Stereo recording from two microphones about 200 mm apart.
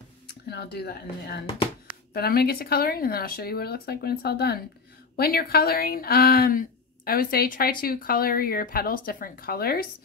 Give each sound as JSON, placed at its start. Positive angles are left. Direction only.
{"t": 0.5, "sound": "speech", "side_deg": 55}